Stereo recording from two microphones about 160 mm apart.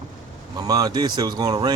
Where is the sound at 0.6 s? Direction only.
25° right (ahead or behind).